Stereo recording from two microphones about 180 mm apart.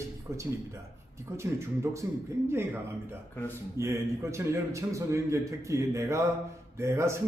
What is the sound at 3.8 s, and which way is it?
A man's voice, 15° right (ahead or behind).